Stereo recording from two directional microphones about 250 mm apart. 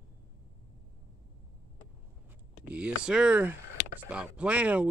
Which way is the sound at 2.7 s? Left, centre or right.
Centre.